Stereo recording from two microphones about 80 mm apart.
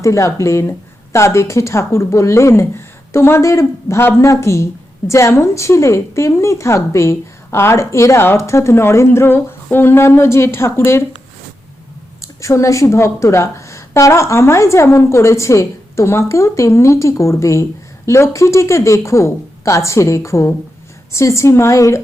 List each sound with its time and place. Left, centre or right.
0.0 s speech: left
12.4 s speech: left